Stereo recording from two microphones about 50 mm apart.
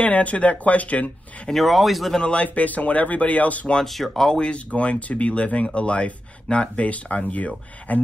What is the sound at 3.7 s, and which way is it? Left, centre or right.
Speech, centre.